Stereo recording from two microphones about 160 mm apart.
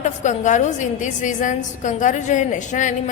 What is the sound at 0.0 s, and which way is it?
A woman's voice, 50° left (ahead or behind).